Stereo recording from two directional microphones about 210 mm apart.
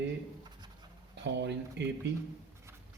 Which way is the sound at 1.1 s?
55° right (ahead or behind).